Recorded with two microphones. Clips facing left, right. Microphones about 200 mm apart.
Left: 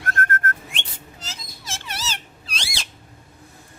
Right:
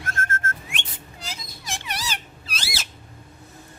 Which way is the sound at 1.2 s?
15° right (ahead or behind).